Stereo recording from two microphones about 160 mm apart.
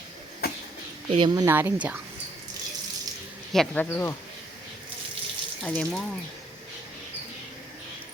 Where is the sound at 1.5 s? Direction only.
10° right (ahead or behind).